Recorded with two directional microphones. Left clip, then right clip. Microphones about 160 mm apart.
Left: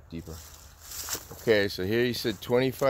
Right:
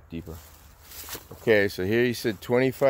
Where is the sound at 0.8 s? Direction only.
50° left (ahead or behind).